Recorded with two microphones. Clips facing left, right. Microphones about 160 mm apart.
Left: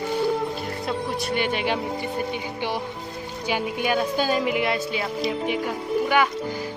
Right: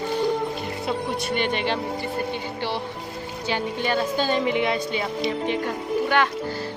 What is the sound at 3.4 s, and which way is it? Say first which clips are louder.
A woman's voice: left 1 dB; 10° left (ahead or behind).